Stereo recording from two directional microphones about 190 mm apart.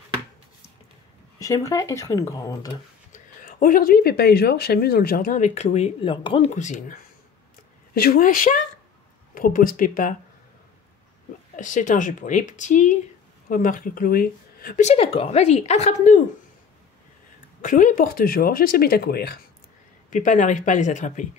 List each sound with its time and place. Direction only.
1.4 s speech: 20° left (ahead or behind)
3.1 s speech: 45° left (ahead or behind)
7.9 s speech: 55° left (ahead or behind)
11.5 s speech: 40° left (ahead or behind)
14.9 s speech: 30° left (ahead or behind)
17.6 s speech: 45° left (ahead or behind)
20.1 s speech: 40° left (ahead or behind)